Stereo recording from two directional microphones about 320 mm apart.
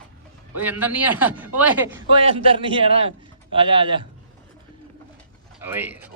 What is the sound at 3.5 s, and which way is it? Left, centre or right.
Speech, centre.